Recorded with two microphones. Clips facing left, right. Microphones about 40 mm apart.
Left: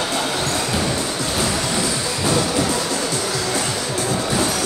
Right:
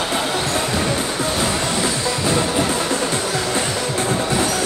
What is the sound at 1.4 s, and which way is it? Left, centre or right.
Music, right.